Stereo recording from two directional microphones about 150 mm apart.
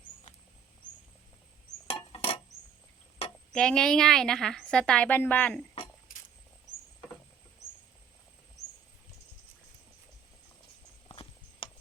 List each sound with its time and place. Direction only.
2.1 s a sound: 40° left (ahead or behind)
3.5 s a woman's voice: 5° left (ahead or behind)
11.1 s clip-clop: 35° left (ahead or behind)